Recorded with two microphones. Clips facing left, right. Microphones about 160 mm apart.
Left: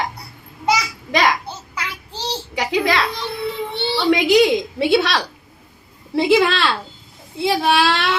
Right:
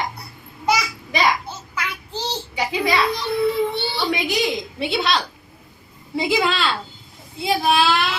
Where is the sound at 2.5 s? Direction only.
90° left.